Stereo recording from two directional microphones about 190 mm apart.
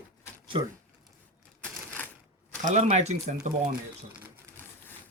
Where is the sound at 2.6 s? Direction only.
35° right (ahead or behind).